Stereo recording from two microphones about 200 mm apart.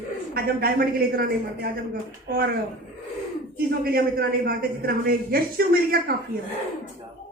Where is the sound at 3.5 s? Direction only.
50° right (ahead or behind).